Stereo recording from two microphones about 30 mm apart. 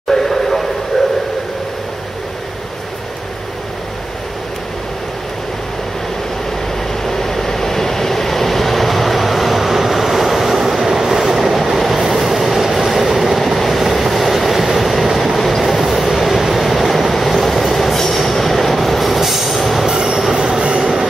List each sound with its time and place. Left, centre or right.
0.1 s a sound: centre
7.1 s train: centre
13.7 s vehicle: centre
15.3 s train: centre
15.6 s train: centre
19.9 s train: right